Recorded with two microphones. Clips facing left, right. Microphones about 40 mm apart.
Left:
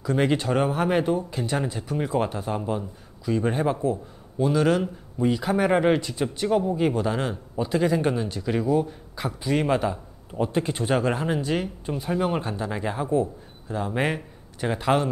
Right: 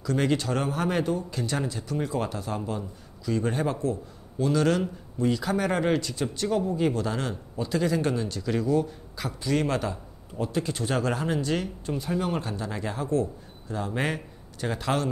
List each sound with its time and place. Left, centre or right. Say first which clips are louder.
0.0 s a man's voice: left 3 dB; centre